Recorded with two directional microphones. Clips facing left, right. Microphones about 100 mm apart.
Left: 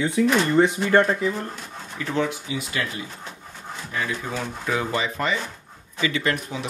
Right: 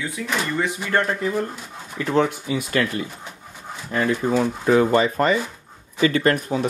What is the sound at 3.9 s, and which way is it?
Speech, 45° right (ahead or behind).